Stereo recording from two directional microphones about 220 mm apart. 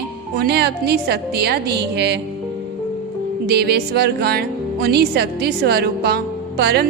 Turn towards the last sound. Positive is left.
turn(degrees=-50)  # may be behind; listen again after turning